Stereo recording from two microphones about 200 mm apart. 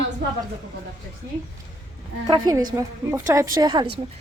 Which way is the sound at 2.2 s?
20° right (ahead or behind).